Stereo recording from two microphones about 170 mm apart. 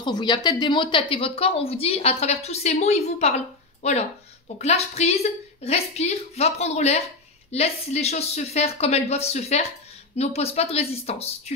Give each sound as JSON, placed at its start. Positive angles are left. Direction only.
{"t": 0.0, "sound": "a woman's voice", "side_deg": 25}